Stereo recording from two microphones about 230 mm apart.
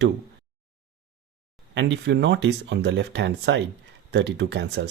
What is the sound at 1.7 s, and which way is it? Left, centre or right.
Speech, right.